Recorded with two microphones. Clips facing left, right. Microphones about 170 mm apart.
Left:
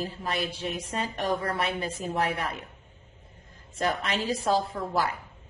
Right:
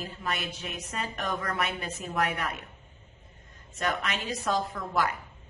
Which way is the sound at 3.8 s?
30° left (ahead or behind).